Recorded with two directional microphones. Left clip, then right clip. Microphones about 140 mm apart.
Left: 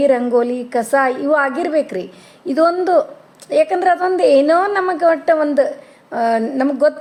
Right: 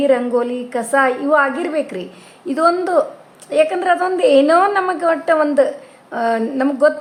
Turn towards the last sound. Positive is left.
turn(degrees=25)  # may be behind; listen again after turning